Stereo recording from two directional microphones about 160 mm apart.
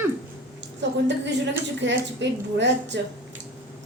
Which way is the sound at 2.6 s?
90° right.